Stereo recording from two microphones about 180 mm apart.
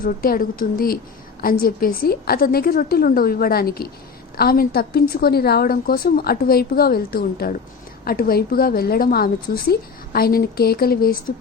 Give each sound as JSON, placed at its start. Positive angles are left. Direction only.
{"t": 0.0, "sound": "a woman's voice", "side_deg": 50}